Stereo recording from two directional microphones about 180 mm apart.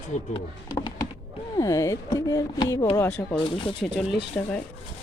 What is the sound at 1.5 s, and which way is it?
Speech, 20° left (ahead or behind).